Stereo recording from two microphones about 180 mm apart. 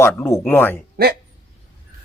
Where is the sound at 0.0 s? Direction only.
10° left (ahead or behind).